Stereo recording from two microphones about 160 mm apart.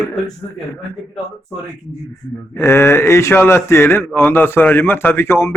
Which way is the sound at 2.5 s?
15° left (ahead or behind).